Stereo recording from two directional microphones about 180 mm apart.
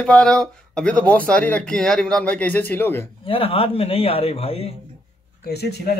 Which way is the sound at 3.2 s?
30° left (ahead or behind).